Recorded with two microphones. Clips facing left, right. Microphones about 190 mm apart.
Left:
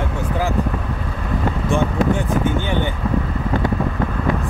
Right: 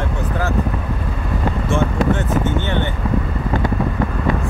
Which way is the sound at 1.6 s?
15° left (ahead or behind).